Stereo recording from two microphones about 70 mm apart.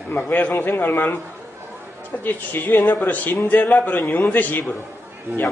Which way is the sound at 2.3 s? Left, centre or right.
Left.